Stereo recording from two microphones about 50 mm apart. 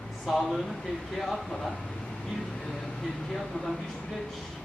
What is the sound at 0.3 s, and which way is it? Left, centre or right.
Speech, centre.